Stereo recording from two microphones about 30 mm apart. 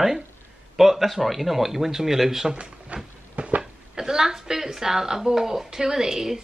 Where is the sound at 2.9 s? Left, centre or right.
Right.